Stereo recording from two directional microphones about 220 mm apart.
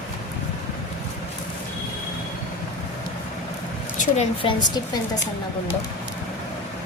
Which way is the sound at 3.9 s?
30° left (ahead or behind).